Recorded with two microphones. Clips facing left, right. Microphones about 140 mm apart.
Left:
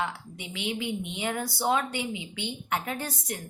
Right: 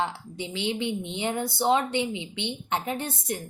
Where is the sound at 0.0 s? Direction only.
30° right (ahead or behind).